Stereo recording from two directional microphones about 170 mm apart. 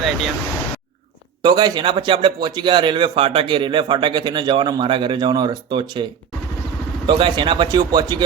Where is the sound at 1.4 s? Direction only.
25° right (ahead or behind).